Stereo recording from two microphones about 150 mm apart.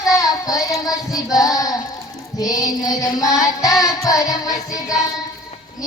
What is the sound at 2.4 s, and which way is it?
Music, 25° left (ahead or behind).